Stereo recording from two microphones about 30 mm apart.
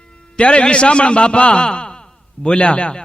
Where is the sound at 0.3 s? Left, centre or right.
Left.